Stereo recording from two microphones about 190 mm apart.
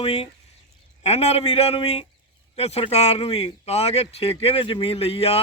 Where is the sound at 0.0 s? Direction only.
30° left (ahead or behind).